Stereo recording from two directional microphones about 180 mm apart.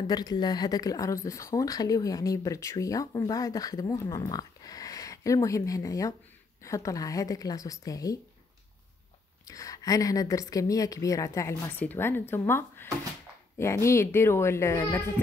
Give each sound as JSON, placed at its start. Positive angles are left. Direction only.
{"t": 0.0, "sound": "speech", "side_deg": 20}
{"t": 9.5, "sound": "a woman's voice", "side_deg": 20}